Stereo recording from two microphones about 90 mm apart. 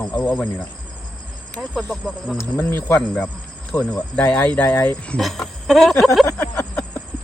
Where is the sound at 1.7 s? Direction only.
10° left (ahead or behind).